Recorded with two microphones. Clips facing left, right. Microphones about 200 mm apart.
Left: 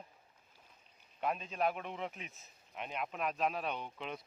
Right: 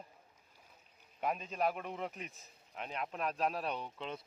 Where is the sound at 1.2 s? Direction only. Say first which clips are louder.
Even; 5° right (ahead or behind).